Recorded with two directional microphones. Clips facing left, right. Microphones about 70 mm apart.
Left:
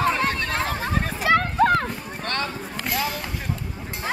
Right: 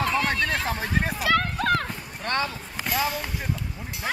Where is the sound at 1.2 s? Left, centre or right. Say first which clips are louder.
Left 7 dB; left.